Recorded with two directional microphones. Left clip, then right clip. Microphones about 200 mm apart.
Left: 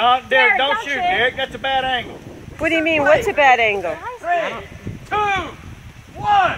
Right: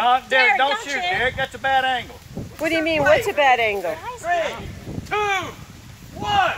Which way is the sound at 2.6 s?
Centre (ahead or behind).